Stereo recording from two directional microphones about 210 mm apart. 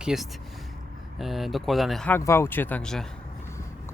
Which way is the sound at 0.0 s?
Centre (ahead or behind).